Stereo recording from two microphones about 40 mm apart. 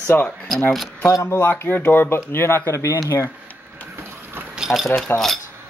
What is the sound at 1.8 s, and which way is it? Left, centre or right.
Speech, left.